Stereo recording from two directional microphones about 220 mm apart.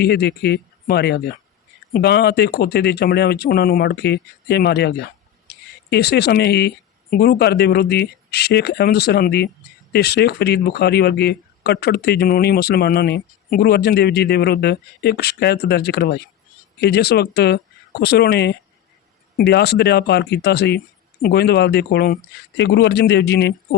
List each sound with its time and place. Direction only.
0.0 s speech: 50° left (ahead or behind)